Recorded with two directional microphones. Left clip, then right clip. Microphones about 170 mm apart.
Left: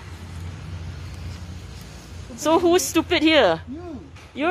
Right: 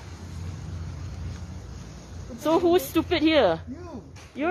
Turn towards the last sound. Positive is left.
turn(degrees=15)  # may be behind; listen again after turning